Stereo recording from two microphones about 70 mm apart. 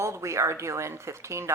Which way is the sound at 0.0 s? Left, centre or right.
Right.